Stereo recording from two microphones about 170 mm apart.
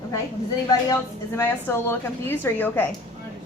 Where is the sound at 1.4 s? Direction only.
15° left (ahead or behind).